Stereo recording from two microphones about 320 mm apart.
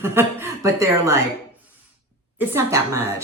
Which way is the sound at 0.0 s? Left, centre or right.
Centre.